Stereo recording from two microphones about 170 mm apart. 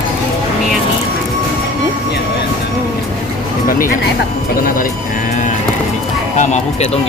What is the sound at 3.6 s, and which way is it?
Speech, 55° left (ahead or behind).